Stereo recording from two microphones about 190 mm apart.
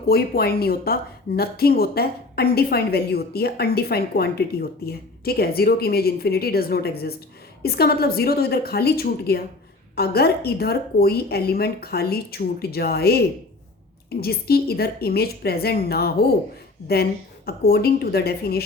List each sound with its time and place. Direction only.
0.1 s speech: 55° left (ahead or behind)